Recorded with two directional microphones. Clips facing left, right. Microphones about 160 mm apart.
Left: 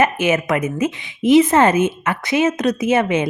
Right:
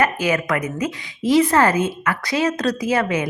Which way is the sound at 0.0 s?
20° left (ahead or behind).